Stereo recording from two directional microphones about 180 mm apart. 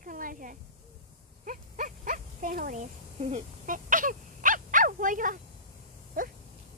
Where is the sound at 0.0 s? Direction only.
50° right (ahead or behind).